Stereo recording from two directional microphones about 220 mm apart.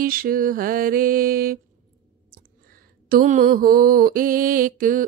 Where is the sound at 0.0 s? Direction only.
40° right (ahead or behind).